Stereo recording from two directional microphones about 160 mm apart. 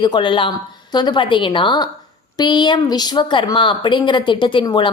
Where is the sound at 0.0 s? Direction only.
30° left (ahead or behind).